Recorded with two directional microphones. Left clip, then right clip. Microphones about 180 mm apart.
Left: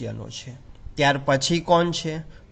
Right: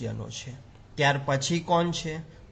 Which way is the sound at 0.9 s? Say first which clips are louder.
Left 5 dB; 30° left (ahead or behind).